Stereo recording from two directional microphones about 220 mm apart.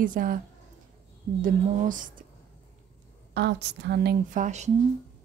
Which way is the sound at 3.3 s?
50° right (ahead or behind).